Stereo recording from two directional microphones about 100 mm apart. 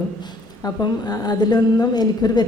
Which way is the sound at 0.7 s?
40° left (ahead or behind).